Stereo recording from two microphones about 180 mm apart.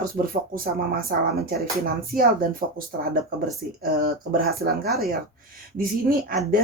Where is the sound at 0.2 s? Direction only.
50° right (ahead or behind).